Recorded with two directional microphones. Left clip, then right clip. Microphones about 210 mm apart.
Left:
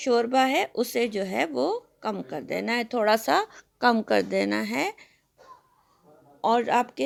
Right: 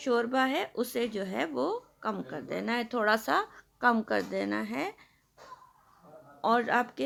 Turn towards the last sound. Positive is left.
turn(degrees=25)  # may be behind; listen again after turning